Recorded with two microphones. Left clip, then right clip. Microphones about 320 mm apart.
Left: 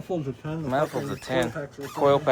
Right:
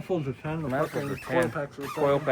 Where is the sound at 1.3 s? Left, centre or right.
Centre.